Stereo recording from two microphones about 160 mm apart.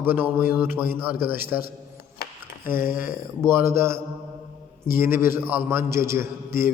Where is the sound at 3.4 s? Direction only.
15° right (ahead or behind).